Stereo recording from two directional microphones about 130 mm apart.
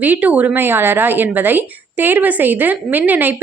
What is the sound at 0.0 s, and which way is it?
A woman's voice, 10° right (ahead or behind).